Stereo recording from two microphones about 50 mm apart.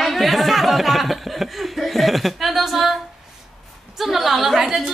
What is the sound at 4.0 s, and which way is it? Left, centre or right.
Speech, centre.